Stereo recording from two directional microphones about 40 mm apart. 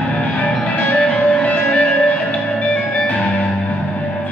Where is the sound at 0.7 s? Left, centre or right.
Left.